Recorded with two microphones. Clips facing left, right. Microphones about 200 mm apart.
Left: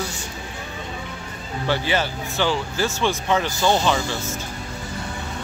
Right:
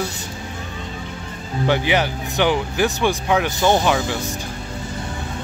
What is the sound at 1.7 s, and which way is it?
Speech, 15° right (ahead or behind).